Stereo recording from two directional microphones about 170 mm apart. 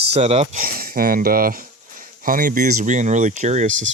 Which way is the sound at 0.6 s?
60° right (ahead or behind).